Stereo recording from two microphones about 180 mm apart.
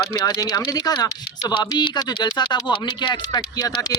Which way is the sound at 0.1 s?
20° left (ahead or behind).